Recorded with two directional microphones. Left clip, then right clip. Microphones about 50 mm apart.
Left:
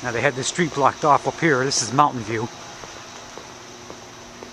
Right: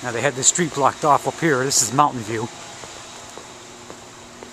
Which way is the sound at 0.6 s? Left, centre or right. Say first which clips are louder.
Left 1 dB; right.